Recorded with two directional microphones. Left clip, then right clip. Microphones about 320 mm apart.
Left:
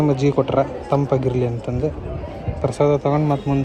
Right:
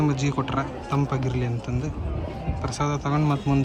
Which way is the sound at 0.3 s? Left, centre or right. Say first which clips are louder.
Left 9 dB; centre.